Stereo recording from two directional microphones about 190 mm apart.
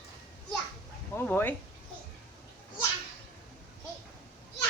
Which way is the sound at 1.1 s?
10° left (ahead or behind).